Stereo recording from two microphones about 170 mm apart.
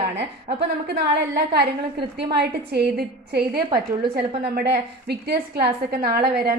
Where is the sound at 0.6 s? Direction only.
80° right.